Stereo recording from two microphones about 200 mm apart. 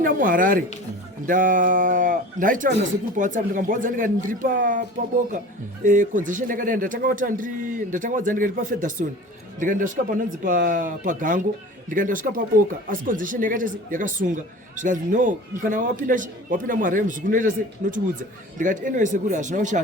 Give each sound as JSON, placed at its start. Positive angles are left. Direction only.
{"t": 0.0, "sound": "speech", "side_deg": -45}
{"t": 5.8, "sound": "speech", "side_deg": -40}
{"t": 18.5, "sound": "speech", "side_deg": -40}